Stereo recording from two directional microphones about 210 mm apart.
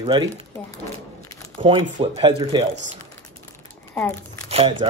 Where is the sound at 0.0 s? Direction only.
20° right (ahead or behind).